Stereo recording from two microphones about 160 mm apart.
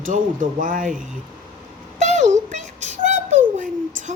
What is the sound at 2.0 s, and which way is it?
Music, 50° right (ahead or behind).